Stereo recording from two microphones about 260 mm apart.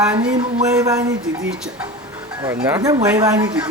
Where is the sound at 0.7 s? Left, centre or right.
Centre.